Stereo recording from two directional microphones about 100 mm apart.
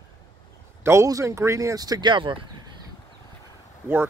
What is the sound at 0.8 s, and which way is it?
Speech, 30° right (ahead or behind).